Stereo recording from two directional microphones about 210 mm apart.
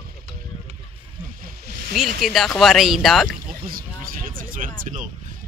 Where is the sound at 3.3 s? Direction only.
45° right (ahead or behind).